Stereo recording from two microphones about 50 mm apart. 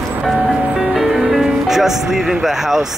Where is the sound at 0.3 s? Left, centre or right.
Centre.